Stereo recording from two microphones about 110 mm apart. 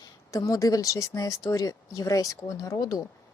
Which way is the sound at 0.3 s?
30° left (ahead or behind).